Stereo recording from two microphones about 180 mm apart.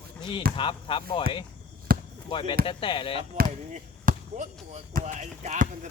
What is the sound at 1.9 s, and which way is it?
Basketball bounce, 55° right (ahead or behind).